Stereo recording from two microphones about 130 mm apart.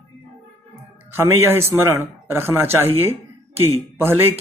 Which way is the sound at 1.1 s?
20° right (ahead or behind).